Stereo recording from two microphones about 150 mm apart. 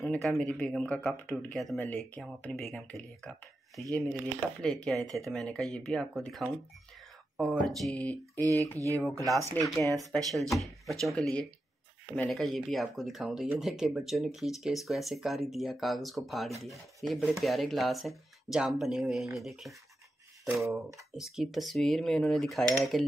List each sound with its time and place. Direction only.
0.0 s speech: centre (ahead or behind)
7.6 s speech: 5° left (ahead or behind)
8.7 s speech: 20° right (ahead or behind)
9.5 s speech: 15° left (ahead or behind)
9.9 s speech: centre (ahead or behind)
20.7 s speech: centre (ahead or behind)